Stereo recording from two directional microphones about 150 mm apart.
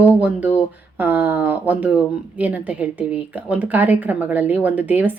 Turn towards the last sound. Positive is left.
turn(degrees=-10)  # may be behind; listen again after turning